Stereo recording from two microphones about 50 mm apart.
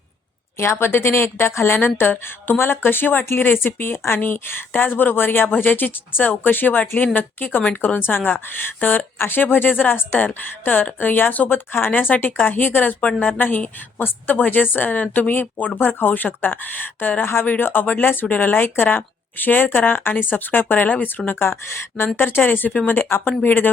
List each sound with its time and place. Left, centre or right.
0.6 s a woman's voice: left
4.2 s a woman's voice: left
21.3 s a woman's voice: left
22.9 s a woman's voice: left
23.2 s speech: left